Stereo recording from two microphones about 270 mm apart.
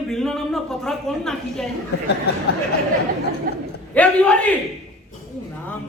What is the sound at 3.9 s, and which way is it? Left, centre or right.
Speech, centre.